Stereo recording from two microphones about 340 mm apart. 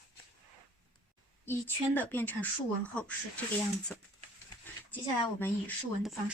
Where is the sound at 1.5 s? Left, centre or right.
Centre.